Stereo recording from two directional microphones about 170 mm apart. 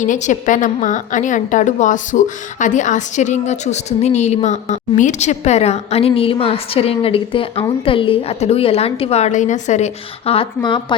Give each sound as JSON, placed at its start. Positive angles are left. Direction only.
{"t": 0.0, "sound": "a woman's voice", "side_deg": 45}